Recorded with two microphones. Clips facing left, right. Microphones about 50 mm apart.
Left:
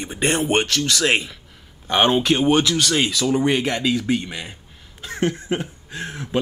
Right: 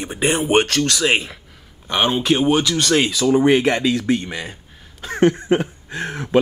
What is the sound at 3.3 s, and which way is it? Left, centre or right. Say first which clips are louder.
Speech: right 7 dB; centre.